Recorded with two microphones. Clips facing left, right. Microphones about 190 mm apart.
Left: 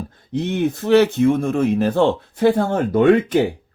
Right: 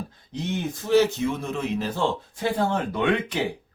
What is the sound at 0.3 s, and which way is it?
Speech, 60° left (ahead or behind).